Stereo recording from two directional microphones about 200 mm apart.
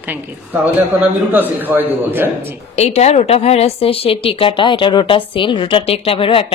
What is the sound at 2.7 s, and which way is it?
Speech, 35° left (ahead or behind).